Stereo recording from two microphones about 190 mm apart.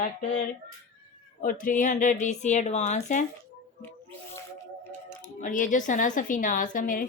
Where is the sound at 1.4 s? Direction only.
45° left (ahead or behind).